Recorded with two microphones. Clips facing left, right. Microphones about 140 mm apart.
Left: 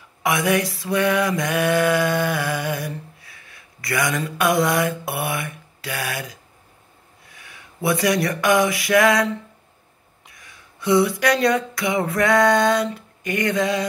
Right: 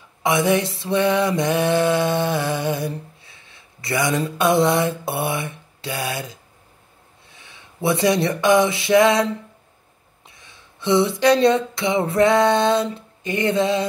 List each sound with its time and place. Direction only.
0.2 s mantra: 25° right (ahead or behind)
7.2 s speech: 25° right (ahead or behind)
10.2 s a sound: 25° right (ahead or behind)